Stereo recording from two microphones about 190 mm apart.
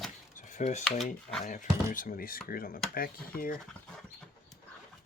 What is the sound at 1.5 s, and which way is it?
Speech, 45° left (ahead or behind).